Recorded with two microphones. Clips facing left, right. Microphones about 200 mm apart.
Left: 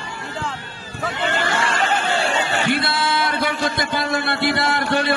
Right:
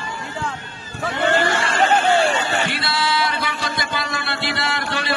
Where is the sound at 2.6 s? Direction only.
55° left (ahead or behind).